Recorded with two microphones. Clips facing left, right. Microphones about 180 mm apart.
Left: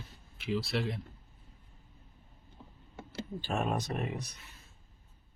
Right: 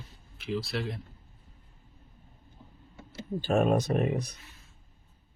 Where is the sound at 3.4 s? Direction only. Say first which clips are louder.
Right 9 dB; 50° right (ahead or behind).